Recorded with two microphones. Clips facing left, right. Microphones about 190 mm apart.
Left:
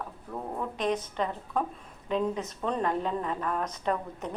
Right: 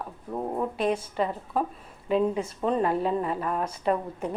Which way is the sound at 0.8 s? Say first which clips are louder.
Right 1 dB; 10° right (ahead or behind).